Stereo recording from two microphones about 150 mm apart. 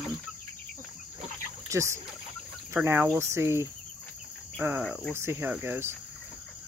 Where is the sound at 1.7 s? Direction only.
20° right (ahead or behind).